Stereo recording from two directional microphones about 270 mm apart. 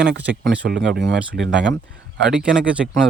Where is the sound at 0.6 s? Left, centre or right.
Right.